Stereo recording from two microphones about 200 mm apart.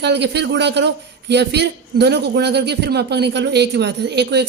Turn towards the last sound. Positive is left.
turn(degrees=-55)  # may be behind; listen again after turning